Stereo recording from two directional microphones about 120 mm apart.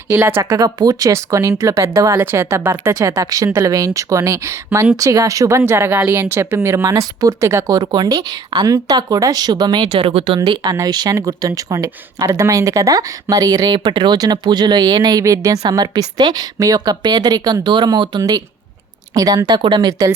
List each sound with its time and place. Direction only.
0.1 s speech: 20° right (ahead or behind)
0.6 s speech: 30° right (ahead or behind); by 10.4 s 50° right (ahead or behind)
10.4 s speech: 35° right (ahead or behind)
19.9 s speech: 30° right (ahead or behind)